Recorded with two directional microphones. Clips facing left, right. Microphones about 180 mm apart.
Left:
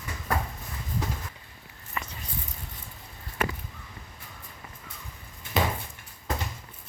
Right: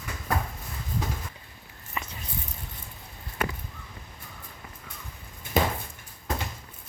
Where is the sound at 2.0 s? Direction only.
20° right (ahead or behind).